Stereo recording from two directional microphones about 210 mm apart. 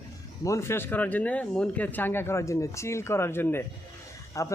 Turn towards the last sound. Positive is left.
turn(degrees=15)  # may be behind; listen again after turning